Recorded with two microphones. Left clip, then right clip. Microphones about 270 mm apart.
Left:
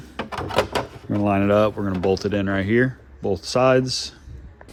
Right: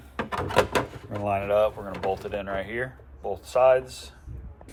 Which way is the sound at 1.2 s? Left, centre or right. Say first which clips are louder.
Left 4 dB; left.